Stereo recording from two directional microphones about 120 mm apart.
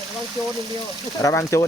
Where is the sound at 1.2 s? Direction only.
25° left (ahead or behind).